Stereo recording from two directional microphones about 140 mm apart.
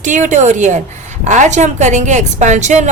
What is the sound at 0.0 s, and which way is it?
A woman's voice, 65° right (ahead or behind).